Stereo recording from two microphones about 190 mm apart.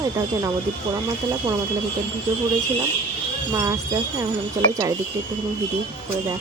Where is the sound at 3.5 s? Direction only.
15° right (ahead or behind).